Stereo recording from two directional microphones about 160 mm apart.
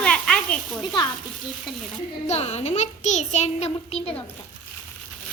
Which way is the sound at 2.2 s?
40° left (ahead or behind).